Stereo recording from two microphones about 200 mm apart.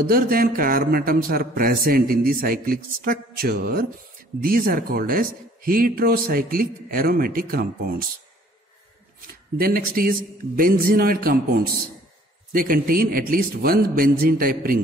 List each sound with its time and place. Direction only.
0.0 s speech: 45° right (ahead or behind)
9.3 s speech: 45° right (ahead or behind)